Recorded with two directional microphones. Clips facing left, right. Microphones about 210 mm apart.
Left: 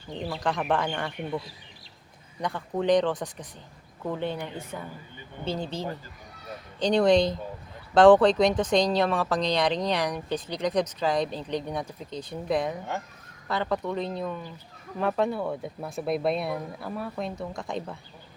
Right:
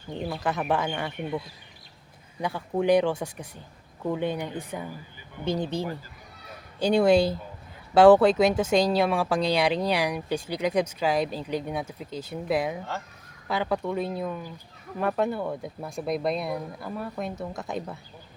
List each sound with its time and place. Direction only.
0.3 s speech: 5° right (ahead or behind)
2.4 s speech: 10° right (ahead or behind)